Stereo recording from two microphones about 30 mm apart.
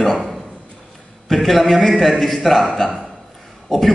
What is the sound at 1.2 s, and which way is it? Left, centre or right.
A man's voice, centre.